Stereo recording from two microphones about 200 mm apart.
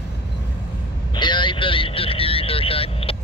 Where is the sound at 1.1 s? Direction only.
25° left (ahead or behind).